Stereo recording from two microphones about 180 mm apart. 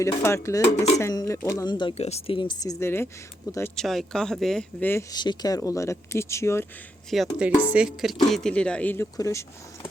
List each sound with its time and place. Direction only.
0.0 s speech: 15° left (ahead or behind)
3.8 s speech: centre (ahead or behind)
5.1 s speech: 25° left (ahead or behind)
7.1 s speech: centre (ahead or behind); by 9.5 s 15° left (ahead or behind)